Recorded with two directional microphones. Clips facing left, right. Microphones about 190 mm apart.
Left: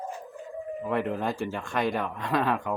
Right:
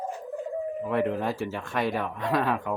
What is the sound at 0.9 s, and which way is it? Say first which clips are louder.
Speech: right 1 dB; centre (ahead or behind).